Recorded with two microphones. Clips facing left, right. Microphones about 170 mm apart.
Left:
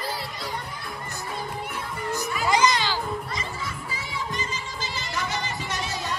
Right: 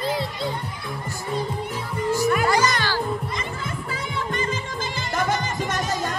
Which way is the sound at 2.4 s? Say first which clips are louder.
Right 1 dB; 20° left (ahead or behind).